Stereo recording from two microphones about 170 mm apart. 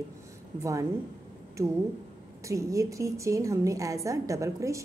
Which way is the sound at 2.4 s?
20° right (ahead or behind).